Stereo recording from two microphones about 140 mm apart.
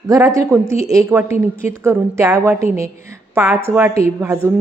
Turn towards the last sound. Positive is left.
turn(degrees=-20)  # may be behind; listen again after turning